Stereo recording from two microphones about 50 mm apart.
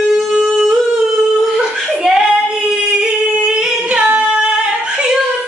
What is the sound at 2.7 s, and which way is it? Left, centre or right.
Singing, centre.